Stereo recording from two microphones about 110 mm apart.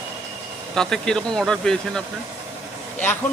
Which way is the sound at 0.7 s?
5° left (ahead or behind).